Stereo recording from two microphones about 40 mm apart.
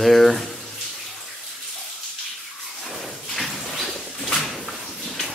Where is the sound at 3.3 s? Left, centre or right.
Centre.